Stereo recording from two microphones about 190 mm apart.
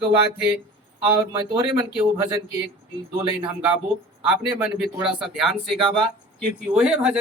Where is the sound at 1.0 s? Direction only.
25° right (ahead or behind).